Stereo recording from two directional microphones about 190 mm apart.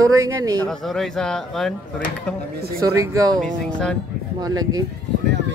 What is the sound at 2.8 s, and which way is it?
Speech, 15° right (ahead or behind).